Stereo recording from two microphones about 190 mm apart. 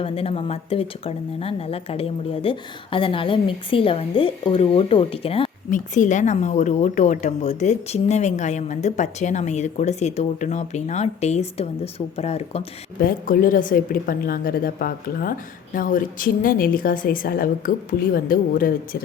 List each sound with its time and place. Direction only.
0.0 s speech: 30° left (ahead or behind)
13.0 s a woman's voice: 50° left (ahead or behind)